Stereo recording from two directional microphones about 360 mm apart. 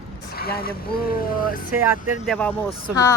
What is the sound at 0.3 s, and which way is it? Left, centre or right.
Speech, left.